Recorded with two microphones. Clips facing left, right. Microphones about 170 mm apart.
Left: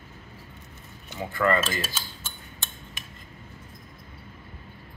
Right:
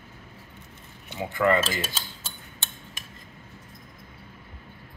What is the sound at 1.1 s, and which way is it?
Speech, 15° right (ahead or behind).